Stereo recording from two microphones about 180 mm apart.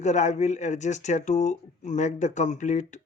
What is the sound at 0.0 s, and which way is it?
Speech, 40° left (ahead or behind).